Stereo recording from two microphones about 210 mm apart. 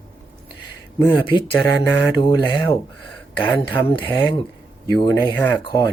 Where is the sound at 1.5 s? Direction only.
10° left (ahead or behind).